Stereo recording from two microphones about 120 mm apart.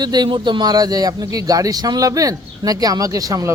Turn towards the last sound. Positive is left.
turn(degrees=-30)  # may be behind; listen again after turning